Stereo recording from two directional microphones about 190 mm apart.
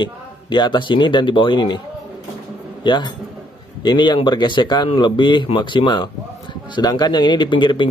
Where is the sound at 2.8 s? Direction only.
25° left (ahead or behind).